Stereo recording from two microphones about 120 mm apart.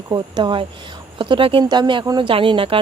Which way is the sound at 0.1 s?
40° right (ahead or behind).